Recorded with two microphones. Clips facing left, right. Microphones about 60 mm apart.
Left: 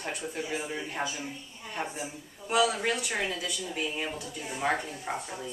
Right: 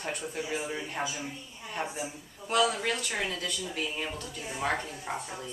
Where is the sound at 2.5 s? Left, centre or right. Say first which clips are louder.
Left 1 dB; centre.